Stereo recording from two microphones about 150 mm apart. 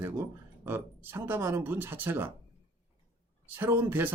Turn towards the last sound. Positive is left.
turn(degrees=-15)  # may be behind; listen again after turning